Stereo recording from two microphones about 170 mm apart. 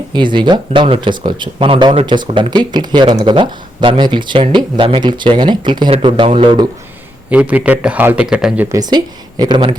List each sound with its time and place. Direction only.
0.1 s speech: 30° right (ahead or behind)
7.3 s a man's voice: 10° right (ahead or behind)
8.7 s speech: 25° right (ahead or behind)